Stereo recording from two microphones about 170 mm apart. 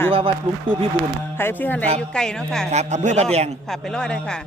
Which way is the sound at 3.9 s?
5° left (ahead or behind).